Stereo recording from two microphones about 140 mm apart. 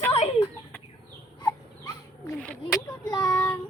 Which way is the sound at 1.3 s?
25° left (ahead or behind).